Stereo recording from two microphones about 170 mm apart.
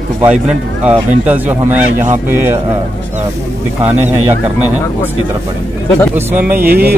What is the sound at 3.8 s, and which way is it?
Speech, 10° right (ahead or behind).